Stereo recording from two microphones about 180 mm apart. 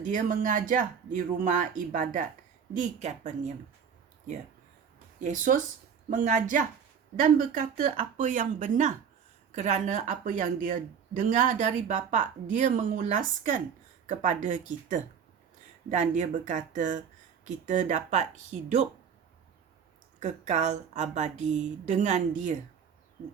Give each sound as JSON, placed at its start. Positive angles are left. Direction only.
{"t": 0.0, "sound": "a woman's voice", "side_deg": -45}
{"t": 5.2, "sound": "speech", "side_deg": -45}
{"t": 20.1, "sound": "a woman's voice", "side_deg": -40}